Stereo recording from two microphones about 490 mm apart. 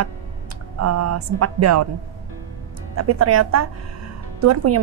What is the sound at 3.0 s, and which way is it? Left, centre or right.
A woman's voice, right.